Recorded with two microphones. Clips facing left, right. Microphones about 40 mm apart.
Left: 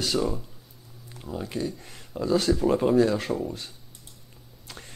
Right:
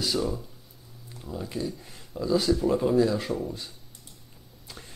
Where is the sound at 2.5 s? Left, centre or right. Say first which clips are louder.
Left 2 dB; left.